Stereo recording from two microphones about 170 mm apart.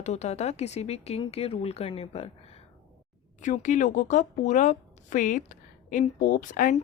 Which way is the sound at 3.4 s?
50° left (ahead or behind).